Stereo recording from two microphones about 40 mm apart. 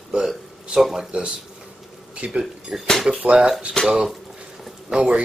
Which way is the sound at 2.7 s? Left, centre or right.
Centre.